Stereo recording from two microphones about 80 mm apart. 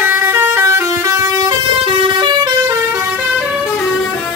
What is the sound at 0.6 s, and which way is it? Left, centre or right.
Vehicle horn, right.